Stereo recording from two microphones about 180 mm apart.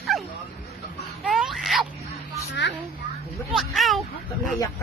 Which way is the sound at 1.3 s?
Centre (ahead or behind).